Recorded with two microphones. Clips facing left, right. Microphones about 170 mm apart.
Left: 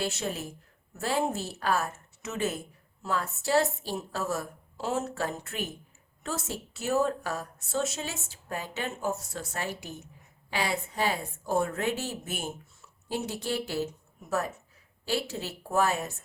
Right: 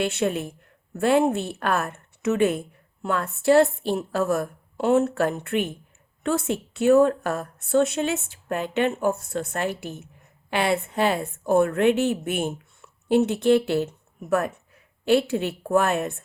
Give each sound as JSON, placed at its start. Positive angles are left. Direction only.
{"t": 0.0, "sound": "a woman's voice", "side_deg": -60}